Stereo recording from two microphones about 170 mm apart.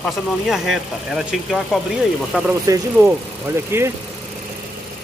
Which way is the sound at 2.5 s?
15° right (ahead or behind).